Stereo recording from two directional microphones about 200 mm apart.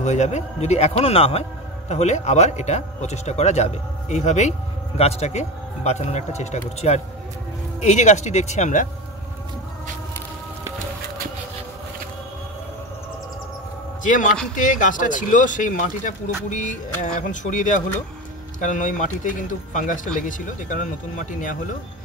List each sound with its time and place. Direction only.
0.0 s speech: 35° left (ahead or behind)
14.0 s speech: 40° left (ahead or behind)